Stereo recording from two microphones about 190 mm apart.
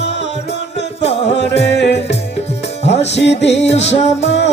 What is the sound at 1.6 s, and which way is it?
Music, 65° left (ahead or behind).